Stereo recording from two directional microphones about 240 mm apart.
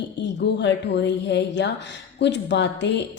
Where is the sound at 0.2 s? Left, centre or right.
Left.